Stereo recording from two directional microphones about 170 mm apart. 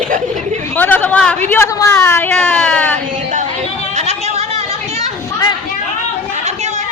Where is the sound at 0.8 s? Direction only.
10° left (ahead or behind).